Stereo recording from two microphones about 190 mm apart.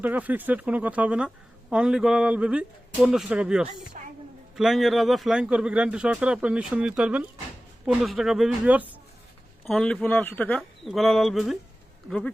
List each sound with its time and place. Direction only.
0.0 s speech: 10° right (ahead or behind)
4.0 s a sound: 40° right (ahead or behind)
4.5 s speech: centre (ahead or behind)